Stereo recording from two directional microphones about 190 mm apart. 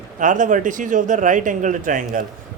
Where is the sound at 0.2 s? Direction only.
40° right (ahead or behind).